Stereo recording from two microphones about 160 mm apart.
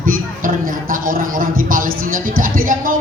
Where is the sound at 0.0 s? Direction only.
60° right (ahead or behind).